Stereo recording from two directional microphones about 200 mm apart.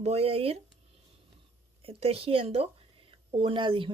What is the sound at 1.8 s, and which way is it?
A woman's voice, 30° right (ahead or behind).